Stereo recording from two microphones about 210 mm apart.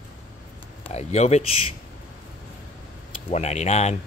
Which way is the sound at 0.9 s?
30° left (ahead or behind).